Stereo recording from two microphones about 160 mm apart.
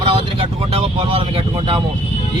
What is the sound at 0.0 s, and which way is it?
Speech, 35° right (ahead or behind).